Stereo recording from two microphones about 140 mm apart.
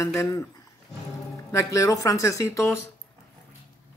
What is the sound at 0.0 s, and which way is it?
Speech, 20° left (ahead or behind).